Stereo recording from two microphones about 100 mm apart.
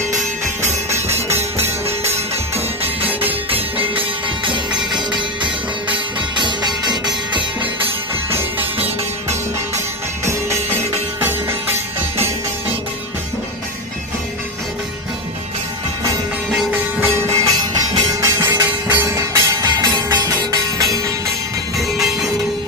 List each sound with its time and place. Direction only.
0.6 s music: 25° right (ahead or behind)
3.0 s music: 20° right (ahead or behind)
3.5 s music: 65° right (ahead or behind)
4.9 s music: 50° right (ahead or behind)
8.3 s music: 25° right (ahead or behind)
11.2 s music: 20° right (ahead or behind)
17.2 s music: 40° right (ahead or behind)
18.6 s music: 20° right (ahead or behind); by 20.3 s 35° right (ahead or behind)
21.8 s train: centre (ahead or behind)